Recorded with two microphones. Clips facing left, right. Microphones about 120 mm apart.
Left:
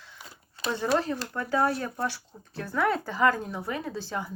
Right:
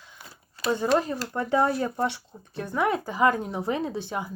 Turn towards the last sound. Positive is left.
turn(degrees=-15)  # may be behind; listen again after turning